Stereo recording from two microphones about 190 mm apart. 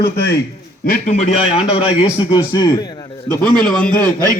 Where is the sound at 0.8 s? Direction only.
45° left (ahead or behind).